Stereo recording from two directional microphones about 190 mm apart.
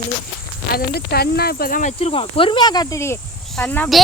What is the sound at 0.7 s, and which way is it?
Speech, 55° left (ahead or behind).